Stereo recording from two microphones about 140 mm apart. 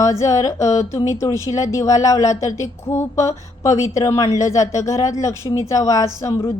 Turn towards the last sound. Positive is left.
turn(degrees=20)  # may be behind; listen again after turning